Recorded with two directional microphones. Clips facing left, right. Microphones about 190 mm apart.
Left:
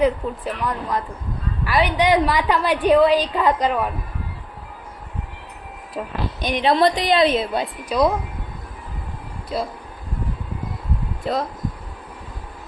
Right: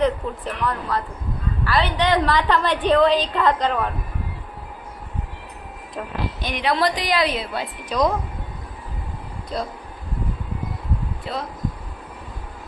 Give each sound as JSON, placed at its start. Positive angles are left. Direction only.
{"t": 0.0, "sound": "a woman's voice", "side_deg": 10}
{"t": 6.4, "sound": "a woman's voice", "side_deg": 20}
{"t": 7.9, "sound": "a woman's voice", "side_deg": 10}
{"t": 9.5, "sound": "a woman's voice", "side_deg": 5}
{"t": 11.3, "sound": "speech", "side_deg": 45}